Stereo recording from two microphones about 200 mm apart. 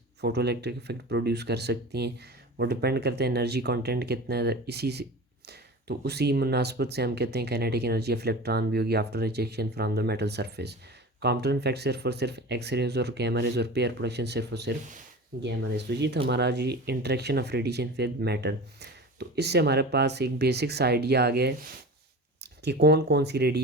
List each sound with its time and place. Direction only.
0.2 s speech: 55° right (ahead or behind)